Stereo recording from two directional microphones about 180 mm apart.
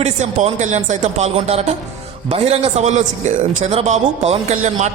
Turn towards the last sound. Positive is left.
turn(degrees=-40)  # may be behind; listen again after turning